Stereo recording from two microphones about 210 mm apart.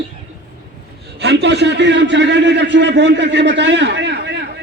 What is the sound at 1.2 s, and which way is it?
A man's voice, 55° right (ahead or behind).